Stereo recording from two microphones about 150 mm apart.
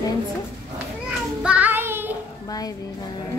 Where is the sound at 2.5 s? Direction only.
25° left (ahead or behind).